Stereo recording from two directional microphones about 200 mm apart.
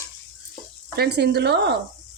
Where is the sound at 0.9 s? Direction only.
55° right (ahead or behind).